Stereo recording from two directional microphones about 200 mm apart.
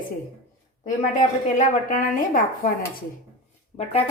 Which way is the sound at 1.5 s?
40° left (ahead or behind).